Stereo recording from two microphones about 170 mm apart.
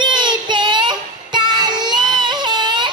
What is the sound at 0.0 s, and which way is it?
Child singing, 25° right (ahead or behind).